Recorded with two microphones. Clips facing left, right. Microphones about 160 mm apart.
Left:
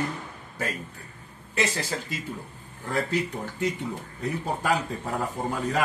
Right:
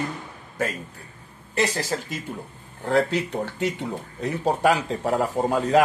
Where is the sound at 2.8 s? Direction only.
75° right (ahead or behind).